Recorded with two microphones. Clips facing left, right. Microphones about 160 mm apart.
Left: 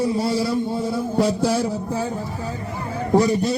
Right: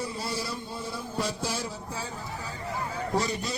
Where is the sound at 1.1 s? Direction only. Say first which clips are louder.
Left 12 dB; 60° left (ahead or behind).